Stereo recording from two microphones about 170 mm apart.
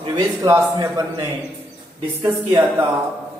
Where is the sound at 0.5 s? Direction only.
20° right (ahead or behind).